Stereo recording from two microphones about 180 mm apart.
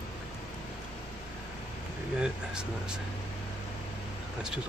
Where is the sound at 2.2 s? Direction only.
5° right (ahead or behind).